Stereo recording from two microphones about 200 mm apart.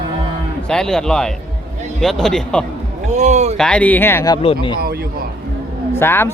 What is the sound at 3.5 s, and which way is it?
A man's voice, 5° left (ahead or behind).